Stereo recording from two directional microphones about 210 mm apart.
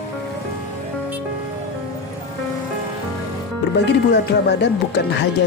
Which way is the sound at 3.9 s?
55° left (ahead or behind).